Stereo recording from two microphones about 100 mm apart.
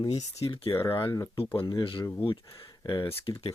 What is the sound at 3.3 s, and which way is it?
Speech, 55° left (ahead or behind).